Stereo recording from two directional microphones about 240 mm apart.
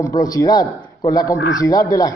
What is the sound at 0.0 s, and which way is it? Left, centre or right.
Speech, centre.